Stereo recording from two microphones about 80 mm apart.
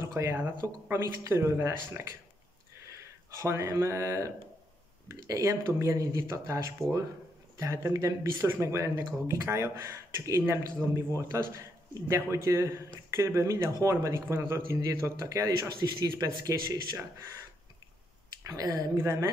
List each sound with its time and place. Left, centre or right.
0.0 s a sound: right
0.4 s speech: right
1.0 s a man's voice: right
3.3 s a man's voice: right
5.3 s a man's voice: right
18.5 s speech: right
18.9 s a man's voice: right